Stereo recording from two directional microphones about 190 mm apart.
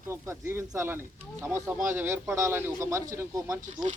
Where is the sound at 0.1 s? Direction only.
15° right (ahead or behind).